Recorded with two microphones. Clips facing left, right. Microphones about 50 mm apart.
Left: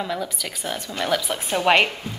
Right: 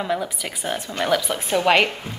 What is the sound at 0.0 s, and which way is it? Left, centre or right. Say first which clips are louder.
Speech: right 3 dB; centre.